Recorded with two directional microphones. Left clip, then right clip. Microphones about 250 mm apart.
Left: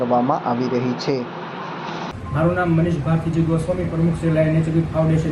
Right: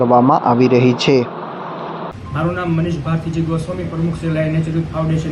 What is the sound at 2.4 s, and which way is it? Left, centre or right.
A man's voice, centre.